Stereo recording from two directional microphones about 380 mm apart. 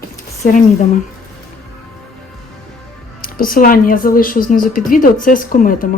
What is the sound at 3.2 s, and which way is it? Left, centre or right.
Speech, left.